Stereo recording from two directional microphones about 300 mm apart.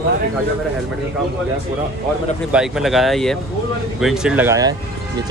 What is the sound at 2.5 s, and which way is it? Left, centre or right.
Speech, centre.